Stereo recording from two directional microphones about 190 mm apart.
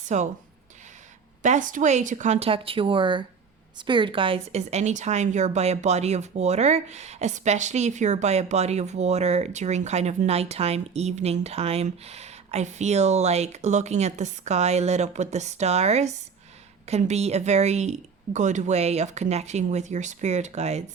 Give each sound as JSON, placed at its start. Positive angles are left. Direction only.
{"t": 0.1, "sound": "a woman's voice", "side_deg": -40}
{"t": 1.4, "sound": "a woman's voice", "side_deg": -40}